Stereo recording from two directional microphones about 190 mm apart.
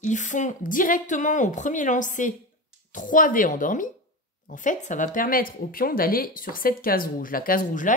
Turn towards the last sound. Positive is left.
turn(degrees=45)  # may be behind; listen again after turning